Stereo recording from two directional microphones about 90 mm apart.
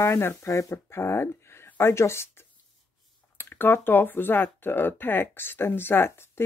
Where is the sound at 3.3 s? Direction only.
25° left (ahead or behind).